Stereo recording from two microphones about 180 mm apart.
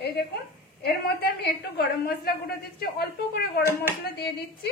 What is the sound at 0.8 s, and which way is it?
A woman's voice, 60° left (ahead or behind).